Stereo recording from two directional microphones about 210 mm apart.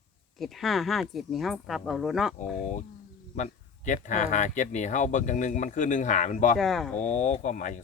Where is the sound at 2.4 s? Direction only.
35° left (ahead or behind).